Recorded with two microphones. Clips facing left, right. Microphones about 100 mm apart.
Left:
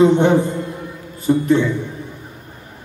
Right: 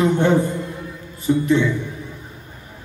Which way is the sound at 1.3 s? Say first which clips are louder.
Left 2 dB; 50° left (ahead or behind).